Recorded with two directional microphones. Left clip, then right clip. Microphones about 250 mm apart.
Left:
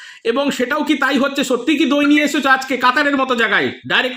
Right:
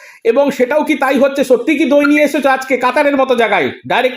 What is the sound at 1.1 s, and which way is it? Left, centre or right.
Speech, centre.